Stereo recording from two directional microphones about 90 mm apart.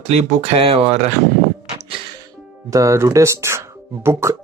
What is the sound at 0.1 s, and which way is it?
Speech, 90° right.